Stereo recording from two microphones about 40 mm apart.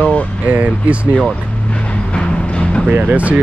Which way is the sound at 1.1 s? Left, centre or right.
Left.